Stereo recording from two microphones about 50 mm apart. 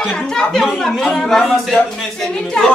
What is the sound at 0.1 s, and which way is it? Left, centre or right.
Speech, centre.